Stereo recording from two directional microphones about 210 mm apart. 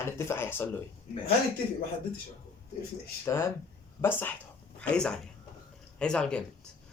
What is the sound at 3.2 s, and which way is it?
A man's voice, 10° left (ahead or behind).